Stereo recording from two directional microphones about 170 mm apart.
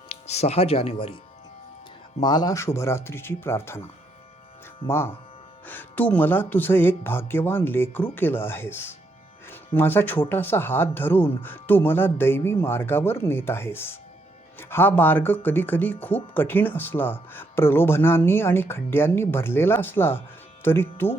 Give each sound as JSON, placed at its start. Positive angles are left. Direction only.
{"t": 0.3, "sound": "speech", "side_deg": 40}
{"t": 2.2, "sound": "speech", "side_deg": 25}
{"t": 4.9, "sound": "speech", "side_deg": 15}